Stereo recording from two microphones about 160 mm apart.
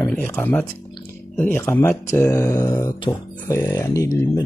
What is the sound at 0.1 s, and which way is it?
Speech, 10° left (ahead or behind).